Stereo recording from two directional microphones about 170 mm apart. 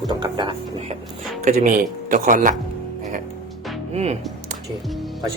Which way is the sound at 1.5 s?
50° right (ahead or behind).